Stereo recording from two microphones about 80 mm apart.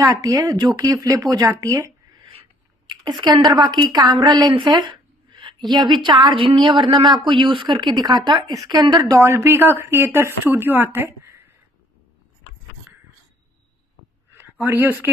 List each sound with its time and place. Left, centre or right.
0.0 s speech: right
0.9 s speech: right
3.1 s a woman's voice: right
5.3 s a woman's voice: right
7.2 s speech: right
8.5 s a woman's voice: right
9.2 s speech: right
14.3 s a sound: right